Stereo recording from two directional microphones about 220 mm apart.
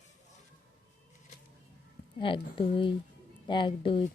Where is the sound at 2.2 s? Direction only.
25° left (ahead or behind).